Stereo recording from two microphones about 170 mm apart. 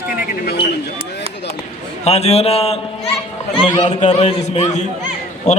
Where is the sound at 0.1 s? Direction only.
70° left (ahead or behind).